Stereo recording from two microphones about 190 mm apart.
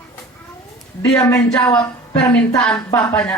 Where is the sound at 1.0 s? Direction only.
15° left (ahead or behind).